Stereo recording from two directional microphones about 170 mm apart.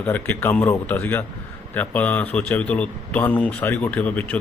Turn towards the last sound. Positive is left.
turn(degrees=10)  # may be behind; listen again after turning